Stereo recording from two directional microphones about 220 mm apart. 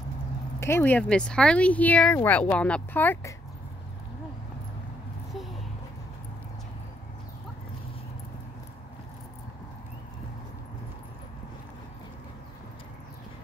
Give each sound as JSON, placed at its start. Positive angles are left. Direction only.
{"t": 0.6, "sound": "speech", "side_deg": 10}